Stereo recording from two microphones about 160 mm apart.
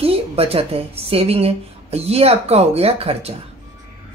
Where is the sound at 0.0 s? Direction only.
40° right (ahead or behind).